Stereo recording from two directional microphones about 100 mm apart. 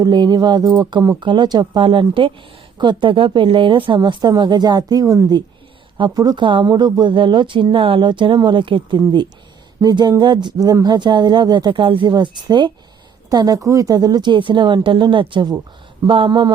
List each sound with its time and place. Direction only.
0.0 s speech: 45° right (ahead or behind)
6.1 s speech: 45° right (ahead or behind)
9.8 s speech: 45° right (ahead or behind)
12.1 s a woman's voice: 45° right (ahead or behind)